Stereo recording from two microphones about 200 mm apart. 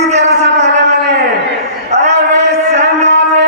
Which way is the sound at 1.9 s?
35° right (ahead or behind).